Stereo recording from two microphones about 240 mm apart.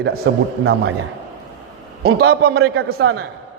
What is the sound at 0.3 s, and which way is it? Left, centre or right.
Speech, right.